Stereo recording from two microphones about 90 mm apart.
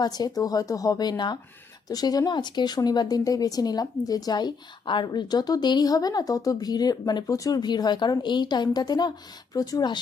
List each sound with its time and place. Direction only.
0.0 s a woman's voice: 45° left (ahead or behind)